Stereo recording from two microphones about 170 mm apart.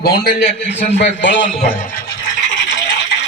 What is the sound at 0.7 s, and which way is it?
Speech, 90° left.